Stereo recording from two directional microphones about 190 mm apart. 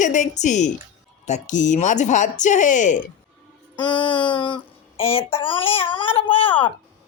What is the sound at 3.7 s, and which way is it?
Speech, 25° left (ahead or behind).